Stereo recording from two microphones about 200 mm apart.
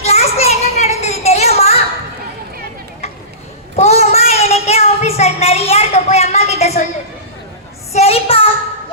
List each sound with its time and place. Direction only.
0.0 s children playing: 30° left (ahead or behind)
3.8 s child singing: 35° left (ahead or behind)
7.9 s child singing: 30° left (ahead or behind)